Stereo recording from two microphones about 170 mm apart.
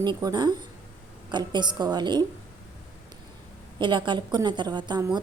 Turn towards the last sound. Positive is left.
turn(degrees=-25)  # may be behind; listen again after turning